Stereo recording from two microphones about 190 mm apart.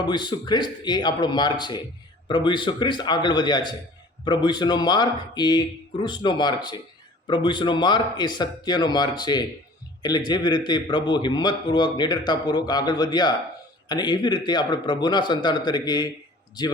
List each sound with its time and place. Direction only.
0.0 s a man's voice: 25° left (ahead or behind)